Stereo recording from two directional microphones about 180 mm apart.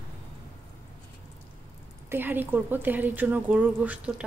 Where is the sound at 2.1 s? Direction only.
10° right (ahead or behind).